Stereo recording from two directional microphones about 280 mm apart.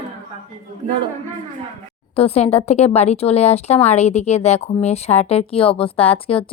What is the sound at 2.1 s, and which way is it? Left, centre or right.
Speech, left.